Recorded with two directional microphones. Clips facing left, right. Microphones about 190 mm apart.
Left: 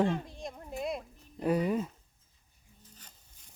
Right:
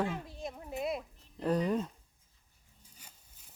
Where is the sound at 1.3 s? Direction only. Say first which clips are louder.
Left 2 dB; 10° left (ahead or behind).